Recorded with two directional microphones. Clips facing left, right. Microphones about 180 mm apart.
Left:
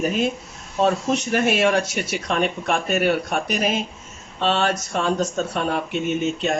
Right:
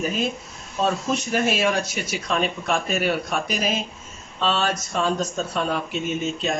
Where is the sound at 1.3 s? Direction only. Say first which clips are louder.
Left 3 dB; 60° left (ahead or behind).